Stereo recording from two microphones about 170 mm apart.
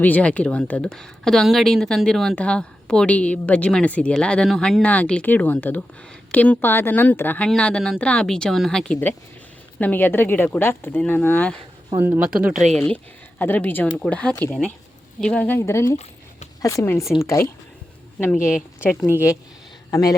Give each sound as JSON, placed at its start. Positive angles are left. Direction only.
{"t": 0.0, "sound": "speech", "side_deg": 10}
{"t": 11.9, "sound": "speech", "side_deg": -10}
{"t": 13.4, "sound": "speech", "side_deg": 10}
{"t": 18.3, "sound": "a woman's voice", "side_deg": -5}
{"t": 19.9, "sound": "a man's voice", "side_deg": 20}